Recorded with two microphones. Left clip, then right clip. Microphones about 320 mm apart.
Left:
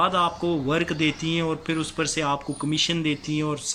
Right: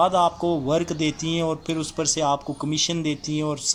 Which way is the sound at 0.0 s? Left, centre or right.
Centre.